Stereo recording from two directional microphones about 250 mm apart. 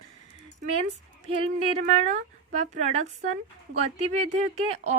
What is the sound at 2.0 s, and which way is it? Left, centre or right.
A woman's voice, right.